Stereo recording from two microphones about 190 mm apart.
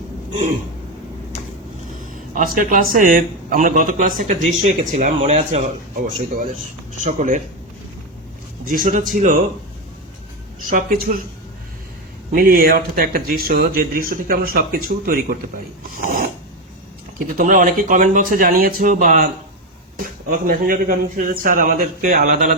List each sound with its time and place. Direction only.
2.3 s a man's voice: 45° right (ahead or behind)
7.0 s speech: 40° right (ahead or behind)
8.6 s a man's voice: 45° right (ahead or behind)
10.7 s a man's voice: 45° right (ahead or behind)
12.3 s a man's voice: 50° right (ahead or behind)
17.3 s a man's voice: 40° right (ahead or behind)